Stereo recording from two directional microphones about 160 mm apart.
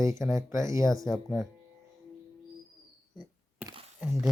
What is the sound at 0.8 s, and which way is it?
Speech, centre (ahead or behind).